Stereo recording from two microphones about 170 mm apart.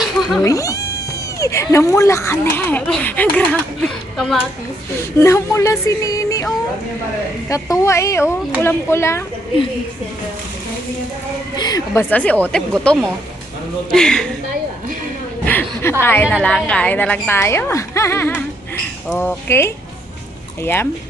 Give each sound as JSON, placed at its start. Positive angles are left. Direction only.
{"t": 0.0, "sound": "cat", "side_deg": 0}
{"t": 0.4, "sound": "speech", "side_deg": 20}
{"t": 5.2, "sound": "a woman's voice", "side_deg": 15}
{"t": 11.5, "sound": "speech", "side_deg": 25}
{"t": 12.1, "sound": "speech", "side_deg": 10}
{"t": 15.4, "sound": "a woman's voice", "side_deg": 10}